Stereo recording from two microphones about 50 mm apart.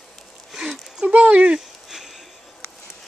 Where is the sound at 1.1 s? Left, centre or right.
Right.